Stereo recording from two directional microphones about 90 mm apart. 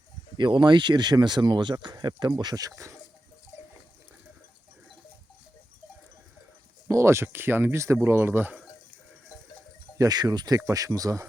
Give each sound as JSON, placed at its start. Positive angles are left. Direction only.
{"t": 0.3, "sound": "speech", "side_deg": -60}
{"t": 6.8, "sound": "speech", "side_deg": -30}
{"t": 10.0, "sound": "speech", "side_deg": -45}